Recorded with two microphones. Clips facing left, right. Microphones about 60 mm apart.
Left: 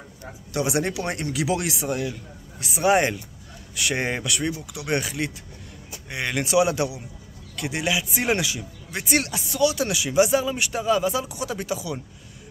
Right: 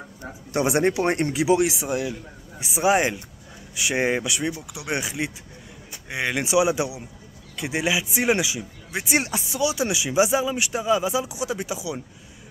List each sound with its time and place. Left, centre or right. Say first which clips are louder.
0.5 s speech: right 4 dB; right
1.5 s speech: right 6 dB; centre
2.9 s speech: left 1 dB; centre